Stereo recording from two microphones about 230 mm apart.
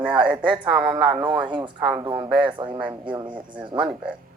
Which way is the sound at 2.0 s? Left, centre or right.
Right.